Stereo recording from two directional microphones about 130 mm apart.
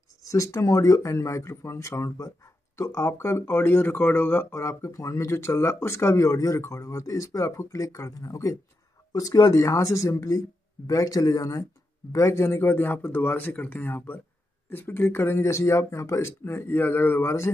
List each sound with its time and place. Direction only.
0.2 s a man's voice: 25° left (ahead or behind)